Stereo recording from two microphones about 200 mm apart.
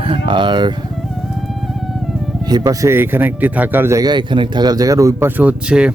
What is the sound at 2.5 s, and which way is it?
A man's voice, 20° right (ahead or behind).